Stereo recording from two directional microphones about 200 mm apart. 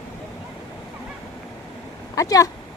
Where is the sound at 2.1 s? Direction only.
15° left (ahead or behind).